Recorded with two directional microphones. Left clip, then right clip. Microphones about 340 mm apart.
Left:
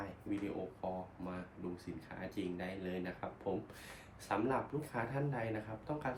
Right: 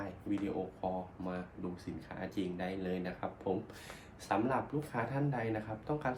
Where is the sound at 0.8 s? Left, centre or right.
Centre.